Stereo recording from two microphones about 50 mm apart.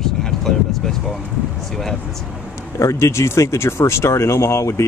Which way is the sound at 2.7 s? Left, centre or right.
Left.